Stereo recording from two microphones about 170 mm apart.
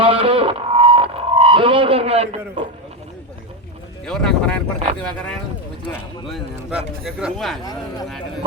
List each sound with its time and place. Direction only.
0.0 s music: 30° right (ahead or behind)
4.0 s speech: 5° left (ahead or behind)
6.3 s speech: 5° right (ahead or behind)
7.6 s speech: 25° left (ahead or behind)